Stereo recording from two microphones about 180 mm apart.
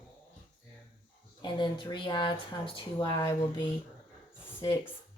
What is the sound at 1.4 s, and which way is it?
Speech, 25° left (ahead or behind).